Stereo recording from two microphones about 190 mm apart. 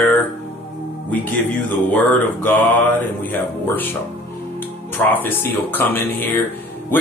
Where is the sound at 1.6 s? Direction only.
10° left (ahead or behind).